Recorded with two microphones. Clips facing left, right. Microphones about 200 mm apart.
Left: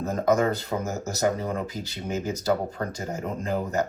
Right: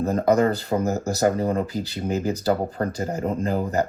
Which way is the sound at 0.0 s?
35° right (ahead or behind).